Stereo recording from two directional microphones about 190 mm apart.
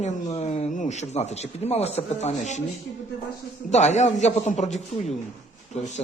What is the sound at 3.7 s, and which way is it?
Speech, 40° left (ahead or behind).